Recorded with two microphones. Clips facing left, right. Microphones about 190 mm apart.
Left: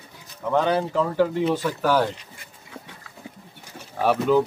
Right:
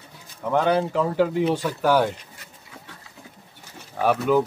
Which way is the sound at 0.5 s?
10° right (ahead or behind).